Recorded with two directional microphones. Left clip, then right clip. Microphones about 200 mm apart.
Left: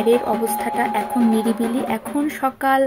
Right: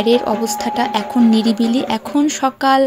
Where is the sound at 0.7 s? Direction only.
25° right (ahead or behind).